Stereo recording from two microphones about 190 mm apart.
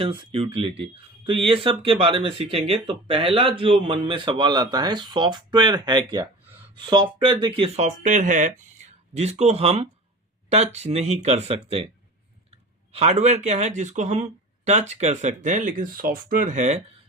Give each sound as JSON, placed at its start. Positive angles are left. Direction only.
{"t": 0.0, "sound": "speech", "side_deg": -25}